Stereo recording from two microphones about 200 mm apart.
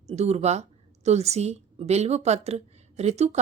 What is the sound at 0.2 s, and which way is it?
A woman's voice, 30° right (ahead or behind).